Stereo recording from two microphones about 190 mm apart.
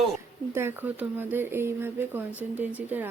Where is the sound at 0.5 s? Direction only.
10° right (ahead or behind).